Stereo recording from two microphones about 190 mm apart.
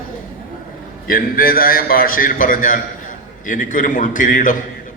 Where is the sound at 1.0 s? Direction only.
50° left (ahead or behind).